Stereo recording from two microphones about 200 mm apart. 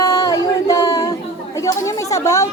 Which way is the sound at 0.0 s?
15° left (ahead or behind).